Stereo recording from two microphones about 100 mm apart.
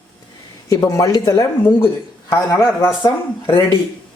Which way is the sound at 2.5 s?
25° left (ahead or behind).